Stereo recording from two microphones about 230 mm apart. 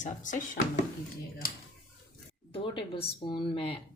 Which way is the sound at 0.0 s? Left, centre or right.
Left.